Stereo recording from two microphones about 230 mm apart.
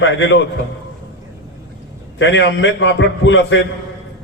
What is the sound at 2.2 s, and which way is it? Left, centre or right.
A man's voice, left.